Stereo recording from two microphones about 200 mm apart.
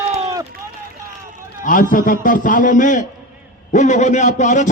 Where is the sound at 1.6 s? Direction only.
45° left (ahead or behind).